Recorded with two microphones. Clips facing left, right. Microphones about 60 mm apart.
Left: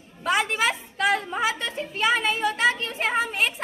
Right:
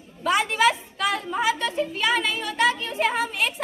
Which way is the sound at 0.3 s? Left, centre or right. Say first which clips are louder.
Right 4 dB; left.